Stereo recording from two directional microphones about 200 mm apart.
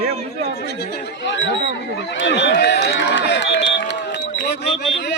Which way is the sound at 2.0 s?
65° left (ahead or behind).